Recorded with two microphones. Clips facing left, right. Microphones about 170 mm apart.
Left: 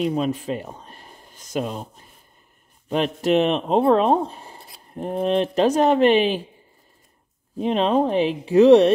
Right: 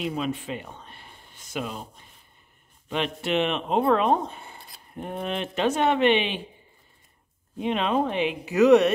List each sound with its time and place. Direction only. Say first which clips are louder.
0.1 s speech: left 6 dB; 40° left (ahead or behind)
4.6 s a sound: left 3 dB; centre (ahead or behind)
4.9 s speech: left 9 dB; 35° left (ahead or behind)
7.5 s speech: left 5 dB; 35° left (ahead or behind)